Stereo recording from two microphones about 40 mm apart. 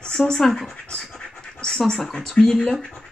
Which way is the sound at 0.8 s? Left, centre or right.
Centre.